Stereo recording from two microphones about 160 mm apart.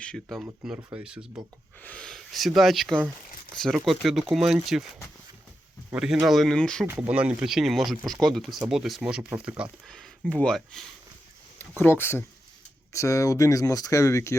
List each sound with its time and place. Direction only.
0.0 s speech: centre (ahead or behind)
1.8 s speech: 5° left (ahead or behind)
5.9 s speech: 5° right (ahead or behind)
6.8 s speech: 15° right (ahead or behind)
9.8 s speech: centre (ahead or behind)
11.8 s speech: 15° left (ahead or behind)